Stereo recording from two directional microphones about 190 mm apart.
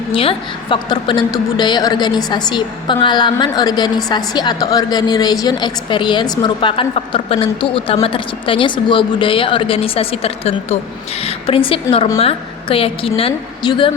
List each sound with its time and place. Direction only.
0.1 s a woman's voice: 30° left (ahead or behind)